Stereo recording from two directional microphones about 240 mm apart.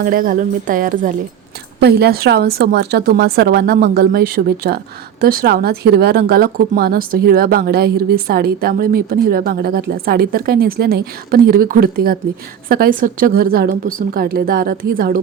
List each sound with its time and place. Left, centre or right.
0.0 s speech: right